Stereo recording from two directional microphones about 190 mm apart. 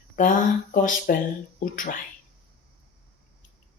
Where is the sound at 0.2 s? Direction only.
45° left (ahead or behind).